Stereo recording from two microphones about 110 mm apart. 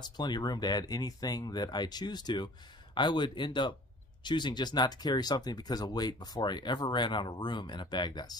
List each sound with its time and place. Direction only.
0.0 s speech: 40° left (ahead or behind)